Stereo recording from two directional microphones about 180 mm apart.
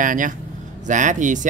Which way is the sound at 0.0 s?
45° right (ahead or behind).